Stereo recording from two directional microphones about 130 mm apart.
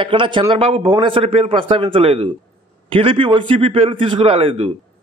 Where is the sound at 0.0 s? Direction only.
40° right (ahead or behind).